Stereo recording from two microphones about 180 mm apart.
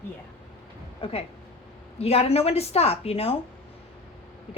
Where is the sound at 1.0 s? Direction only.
30° left (ahead or behind).